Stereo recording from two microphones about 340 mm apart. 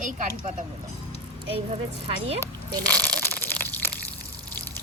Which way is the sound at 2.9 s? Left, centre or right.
Centre.